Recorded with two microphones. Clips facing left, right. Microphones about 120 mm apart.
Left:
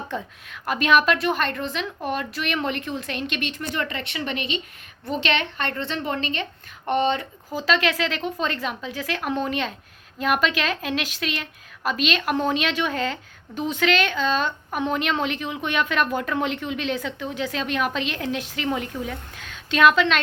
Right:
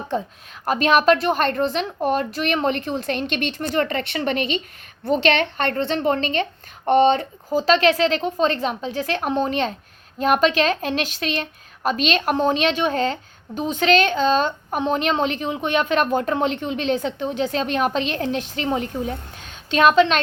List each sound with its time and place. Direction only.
0.1 s a woman's voice: 30° right (ahead or behind)